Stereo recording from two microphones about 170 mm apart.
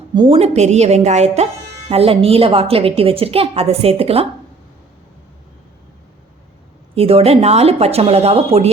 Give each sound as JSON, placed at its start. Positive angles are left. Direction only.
{"t": 0.1, "sound": "a woman's voice", "side_deg": -30}
{"t": 6.9, "sound": "a woman's voice", "side_deg": -35}